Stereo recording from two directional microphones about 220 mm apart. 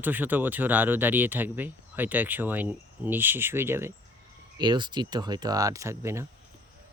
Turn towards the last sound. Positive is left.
turn(degrees=-10)  # may be behind; listen again after turning